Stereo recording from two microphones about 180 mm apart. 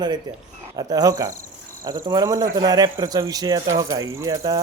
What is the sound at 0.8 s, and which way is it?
Speech, 20° right (ahead or behind).